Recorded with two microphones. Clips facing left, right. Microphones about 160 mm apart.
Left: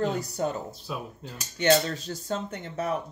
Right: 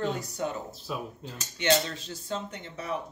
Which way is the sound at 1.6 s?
40° left (ahead or behind).